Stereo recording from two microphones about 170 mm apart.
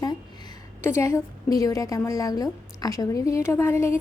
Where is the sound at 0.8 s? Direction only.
15° left (ahead or behind).